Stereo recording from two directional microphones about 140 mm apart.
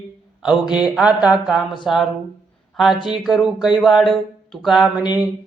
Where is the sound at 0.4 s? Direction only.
5° right (ahead or behind).